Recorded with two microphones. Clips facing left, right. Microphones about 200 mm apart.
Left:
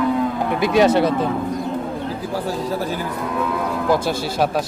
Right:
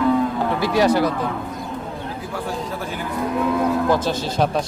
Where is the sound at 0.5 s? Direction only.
20° left (ahead or behind).